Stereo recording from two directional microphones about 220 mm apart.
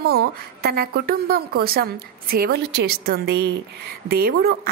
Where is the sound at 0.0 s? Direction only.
45° right (ahead or behind).